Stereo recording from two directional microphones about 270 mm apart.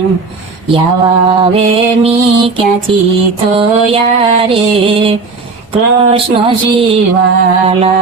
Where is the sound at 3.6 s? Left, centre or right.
Right.